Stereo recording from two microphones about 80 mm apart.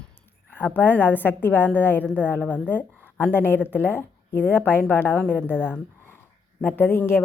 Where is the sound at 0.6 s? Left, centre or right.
Left.